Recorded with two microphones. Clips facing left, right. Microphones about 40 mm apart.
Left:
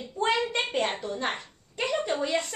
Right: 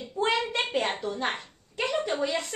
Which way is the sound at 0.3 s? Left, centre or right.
Centre.